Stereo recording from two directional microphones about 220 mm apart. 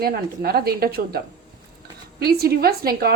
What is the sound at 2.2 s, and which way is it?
Speech, 45° right (ahead or behind).